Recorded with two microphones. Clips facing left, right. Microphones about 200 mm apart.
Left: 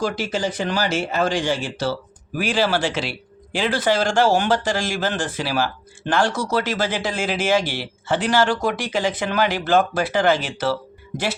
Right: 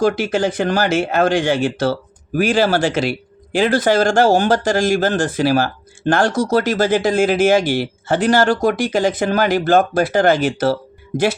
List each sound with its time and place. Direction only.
0.0 s speech: 55° right (ahead or behind)